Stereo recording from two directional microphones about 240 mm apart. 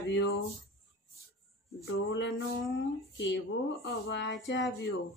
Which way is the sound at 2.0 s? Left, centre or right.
Left.